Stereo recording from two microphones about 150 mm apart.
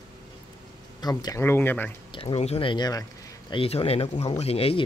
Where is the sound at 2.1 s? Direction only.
35° left (ahead or behind).